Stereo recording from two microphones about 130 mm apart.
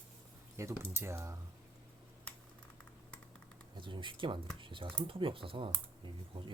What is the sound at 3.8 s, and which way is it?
Speech, 40° right (ahead or behind).